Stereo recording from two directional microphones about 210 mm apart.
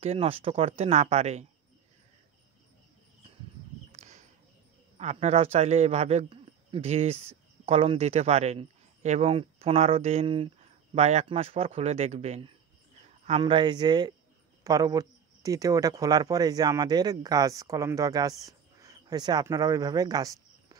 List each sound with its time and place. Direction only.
0.0 s speech: 30° right (ahead or behind)
3.9 s a sound: 35° right (ahead or behind)
4.9 s a man's voice: 30° right (ahead or behind)